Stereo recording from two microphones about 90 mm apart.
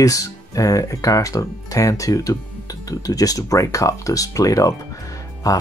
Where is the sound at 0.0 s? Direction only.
40° left (ahead or behind).